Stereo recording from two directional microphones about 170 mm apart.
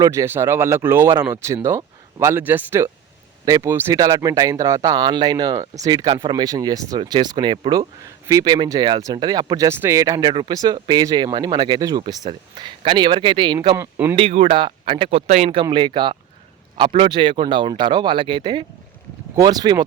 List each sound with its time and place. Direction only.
0.0 s speech: 15° right (ahead or behind)
13.7 s speech: 15° right (ahead or behind)
14.2 s speech: 35° right (ahead or behind)